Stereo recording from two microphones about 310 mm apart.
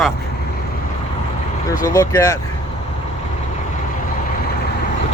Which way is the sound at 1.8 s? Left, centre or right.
Centre.